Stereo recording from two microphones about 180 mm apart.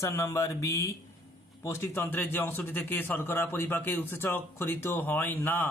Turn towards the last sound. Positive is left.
turn(degrees=10)  # may be behind; listen again after turning